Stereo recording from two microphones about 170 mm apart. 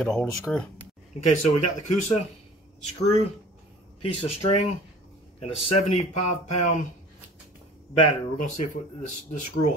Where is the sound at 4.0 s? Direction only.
35° left (ahead or behind).